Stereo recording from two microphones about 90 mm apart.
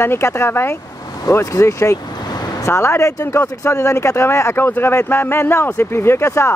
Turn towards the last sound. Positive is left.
turn(degrees=30)  # may be behind; listen again after turning